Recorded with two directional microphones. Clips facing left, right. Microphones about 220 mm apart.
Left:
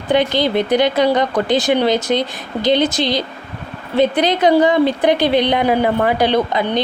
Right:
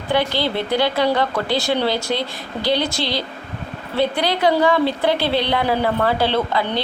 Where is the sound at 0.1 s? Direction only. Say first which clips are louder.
Left 5 dB; 20° left (ahead or behind).